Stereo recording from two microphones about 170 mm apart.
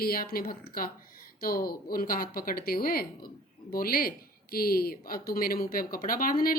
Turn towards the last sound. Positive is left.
turn(degrees=55)  # may be behind; listen again after turning